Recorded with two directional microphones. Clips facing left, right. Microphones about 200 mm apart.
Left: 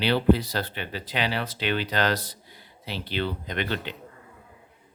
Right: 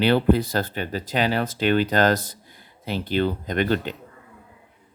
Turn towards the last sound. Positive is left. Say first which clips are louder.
# right 7 dB
turn(degrees=-45)  # may be behind; listen again after turning